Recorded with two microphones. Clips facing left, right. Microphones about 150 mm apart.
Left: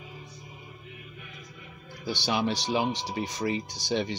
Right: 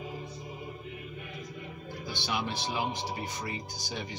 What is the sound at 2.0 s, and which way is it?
Speech, 90° left.